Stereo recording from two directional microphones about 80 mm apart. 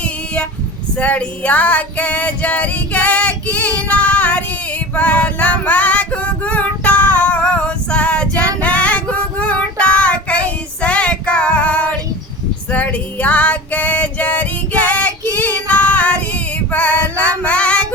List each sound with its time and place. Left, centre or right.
0.9 s female singing: centre